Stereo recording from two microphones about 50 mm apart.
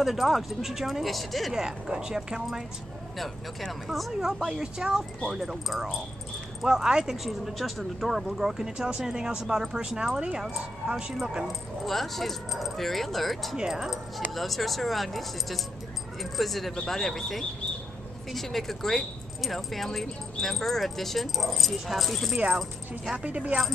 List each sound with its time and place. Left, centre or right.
0.0 s speech: centre
1.5 s speech: centre
3.8 s speech: centre
4.5 s speech: centre
11.8 s speech: centre
13.6 s speech: centre
14.3 s speech: centre
22.3 s speech: centre